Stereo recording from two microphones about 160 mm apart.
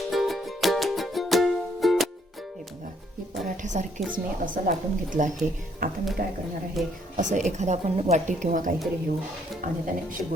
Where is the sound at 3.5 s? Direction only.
50° right (ahead or behind).